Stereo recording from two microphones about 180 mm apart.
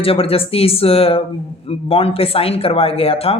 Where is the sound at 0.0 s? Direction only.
30° left (ahead or behind).